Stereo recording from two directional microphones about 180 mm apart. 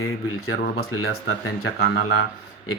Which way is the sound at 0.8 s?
75° left (ahead or behind).